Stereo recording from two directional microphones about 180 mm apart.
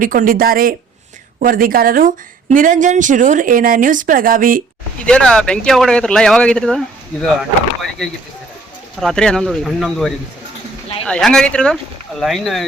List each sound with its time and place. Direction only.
0.0 s a woman's voice: 50° right (ahead or behind)
5.0 s speech: 5° left (ahead or behind)
9.0 s speech: 5° left (ahead or behind)